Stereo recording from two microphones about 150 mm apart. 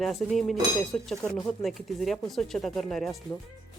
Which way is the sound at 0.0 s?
Centre (ahead or behind).